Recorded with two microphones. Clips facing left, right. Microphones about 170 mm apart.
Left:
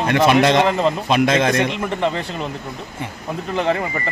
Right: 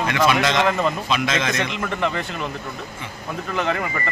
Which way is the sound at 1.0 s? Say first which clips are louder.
Left 6 dB; 55° left (ahead or behind).